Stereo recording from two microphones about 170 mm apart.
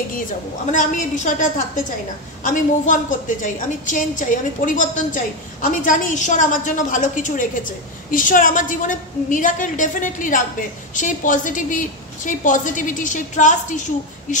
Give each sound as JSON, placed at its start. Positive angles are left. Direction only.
{"t": 0.7, "sound": "a woman's voice", "side_deg": 45}